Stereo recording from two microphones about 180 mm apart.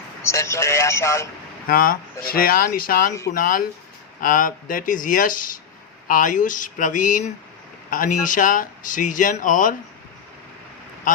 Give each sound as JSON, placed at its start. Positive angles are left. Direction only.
{"t": 0.2, "sound": "a man's voice", "side_deg": 15}
{"t": 1.6, "sound": "speech", "side_deg": 50}